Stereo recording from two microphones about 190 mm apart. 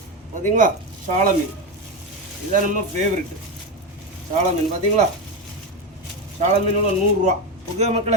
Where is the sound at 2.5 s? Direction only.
45° right (ahead or behind).